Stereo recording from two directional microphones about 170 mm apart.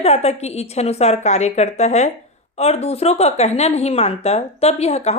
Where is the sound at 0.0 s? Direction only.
40° left (ahead or behind).